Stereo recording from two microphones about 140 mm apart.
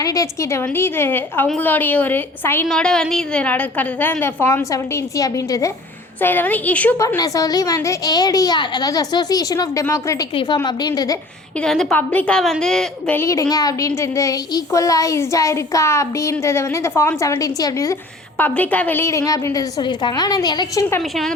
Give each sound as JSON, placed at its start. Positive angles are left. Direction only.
{"t": 0.0, "sound": "a woman's voice", "side_deg": 25}
{"t": 6.1, "sound": "a woman's voice", "side_deg": 15}
{"t": 7.2, "sound": "speech", "side_deg": 25}
{"t": 10.3, "sound": "a woman's voice", "side_deg": 35}
{"t": 11.6, "sound": "a woman's voice", "side_deg": 5}
{"t": 13.1, "sound": "speech", "side_deg": 20}
{"t": 18.3, "sound": "speech", "side_deg": 15}
{"t": 21.0, "sound": "a woman's voice", "side_deg": 0}